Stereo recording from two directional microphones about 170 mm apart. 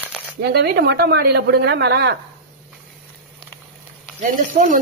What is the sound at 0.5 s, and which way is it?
Speech, 70° right (ahead or behind).